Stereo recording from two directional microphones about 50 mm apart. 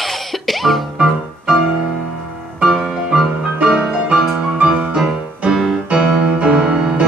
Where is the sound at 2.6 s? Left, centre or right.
Centre.